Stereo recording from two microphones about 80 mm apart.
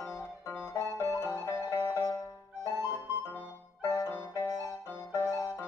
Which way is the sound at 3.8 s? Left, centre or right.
Left.